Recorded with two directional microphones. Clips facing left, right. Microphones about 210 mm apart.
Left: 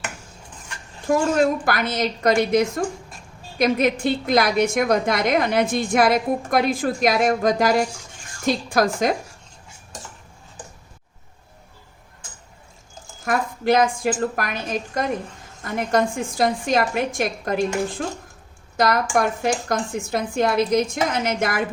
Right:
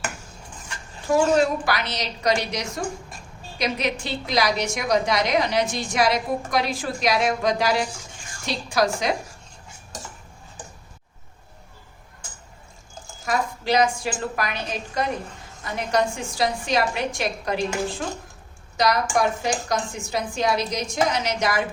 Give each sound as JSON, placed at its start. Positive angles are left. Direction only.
{"t": 1.4, "sound": "a woman's voice", "side_deg": 50}
{"t": 13.2, "sound": "a woman's voice", "side_deg": 55}